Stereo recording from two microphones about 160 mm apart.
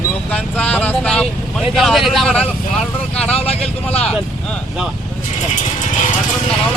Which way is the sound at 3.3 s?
40° left (ahead or behind).